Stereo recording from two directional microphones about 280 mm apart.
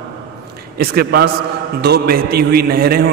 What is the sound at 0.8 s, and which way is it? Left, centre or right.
A man's voice, right.